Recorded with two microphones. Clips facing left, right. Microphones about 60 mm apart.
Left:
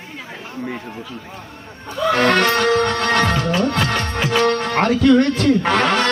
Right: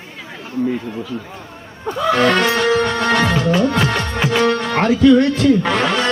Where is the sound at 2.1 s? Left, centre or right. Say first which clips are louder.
Right 1 dB; left.